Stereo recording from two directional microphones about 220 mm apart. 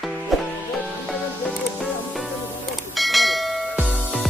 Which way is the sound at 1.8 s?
Centre (ahead or behind).